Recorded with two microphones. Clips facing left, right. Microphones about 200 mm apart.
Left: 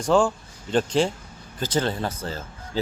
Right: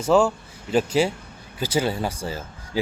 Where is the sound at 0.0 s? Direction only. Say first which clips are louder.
Right 2 dB; 5° right (ahead or behind).